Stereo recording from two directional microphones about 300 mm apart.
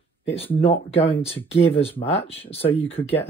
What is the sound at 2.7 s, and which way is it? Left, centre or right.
Speech, centre.